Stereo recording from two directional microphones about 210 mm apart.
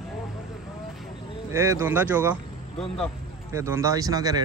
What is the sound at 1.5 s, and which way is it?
A man's voice, 15° right (ahead or behind).